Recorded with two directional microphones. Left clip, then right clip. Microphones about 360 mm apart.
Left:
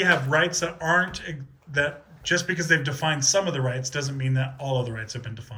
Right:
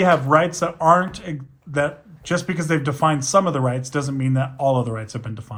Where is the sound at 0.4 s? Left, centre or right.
Centre.